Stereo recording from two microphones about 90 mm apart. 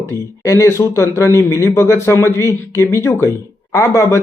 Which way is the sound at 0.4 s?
30° left (ahead or behind).